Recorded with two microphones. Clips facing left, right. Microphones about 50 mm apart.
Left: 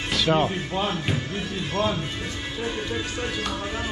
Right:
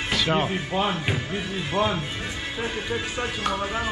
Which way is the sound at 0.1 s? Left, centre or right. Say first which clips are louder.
Left 2 dB; centre.